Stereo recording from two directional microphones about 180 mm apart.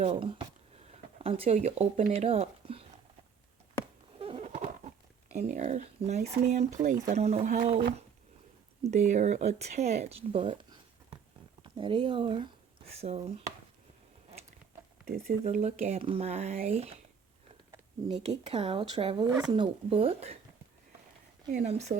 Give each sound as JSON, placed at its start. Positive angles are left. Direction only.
{"t": 0.0, "sound": "speech", "side_deg": -30}
{"t": 4.2, "sound": "a sound", "side_deg": -35}
{"t": 5.3, "sound": "speech", "side_deg": -40}
{"t": 15.0, "sound": "speech", "side_deg": -55}
{"t": 15.4, "sound": "speech", "side_deg": -40}
{"t": 18.1, "sound": "speech", "side_deg": -35}
{"t": 19.2, "sound": "speech", "side_deg": -20}
{"t": 21.5, "sound": "speech", "side_deg": -40}